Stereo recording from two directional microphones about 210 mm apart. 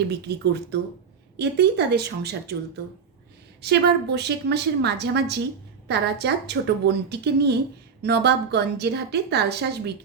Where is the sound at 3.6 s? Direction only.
50° right (ahead or behind).